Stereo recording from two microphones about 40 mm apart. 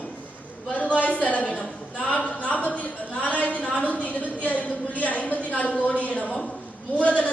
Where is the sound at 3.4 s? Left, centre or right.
Left.